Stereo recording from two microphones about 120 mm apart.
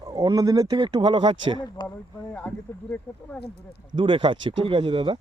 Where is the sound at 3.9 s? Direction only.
45° right (ahead or behind).